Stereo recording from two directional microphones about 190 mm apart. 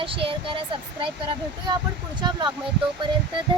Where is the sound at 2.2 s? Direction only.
25° right (ahead or behind).